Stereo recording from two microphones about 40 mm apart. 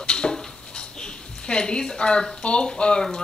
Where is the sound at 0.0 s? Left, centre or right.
Left.